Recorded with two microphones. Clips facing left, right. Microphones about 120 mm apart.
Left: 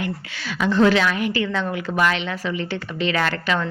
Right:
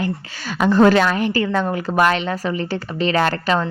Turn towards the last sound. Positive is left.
turn(degrees=-35)  # may be behind; listen again after turning